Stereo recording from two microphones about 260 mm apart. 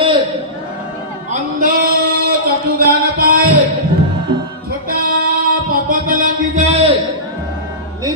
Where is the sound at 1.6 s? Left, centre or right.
Right.